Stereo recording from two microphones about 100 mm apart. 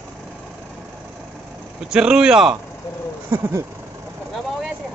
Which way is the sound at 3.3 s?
20° right (ahead or behind).